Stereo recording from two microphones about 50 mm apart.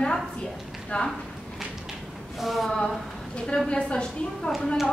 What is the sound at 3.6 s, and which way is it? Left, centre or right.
Speech, centre.